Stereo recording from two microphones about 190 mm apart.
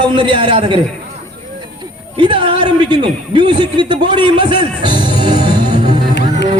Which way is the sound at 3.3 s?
20° right (ahead or behind).